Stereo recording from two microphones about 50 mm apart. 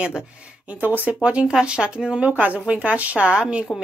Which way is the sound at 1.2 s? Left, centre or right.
Right.